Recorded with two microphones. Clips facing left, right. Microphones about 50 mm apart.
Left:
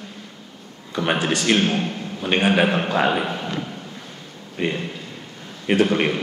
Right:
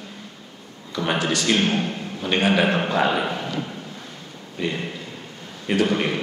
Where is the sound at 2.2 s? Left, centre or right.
Centre.